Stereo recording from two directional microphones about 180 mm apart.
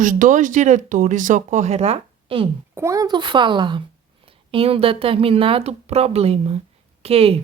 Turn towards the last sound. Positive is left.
turn(degrees=-35)  # may be behind; listen again after turning